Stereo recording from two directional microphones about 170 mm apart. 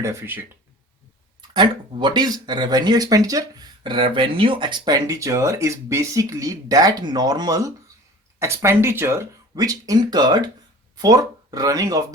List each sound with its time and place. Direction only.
0.0 s speech: 15° right (ahead or behind)
1.4 s speech: 25° right (ahead or behind)